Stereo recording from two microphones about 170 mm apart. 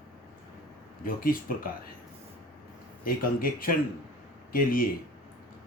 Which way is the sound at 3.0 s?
55° left (ahead or behind).